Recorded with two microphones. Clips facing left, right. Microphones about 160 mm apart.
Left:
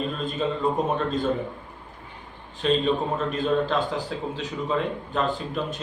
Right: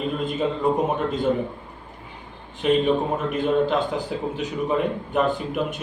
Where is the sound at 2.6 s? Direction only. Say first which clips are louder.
Right 3 dB; 15° right (ahead or behind).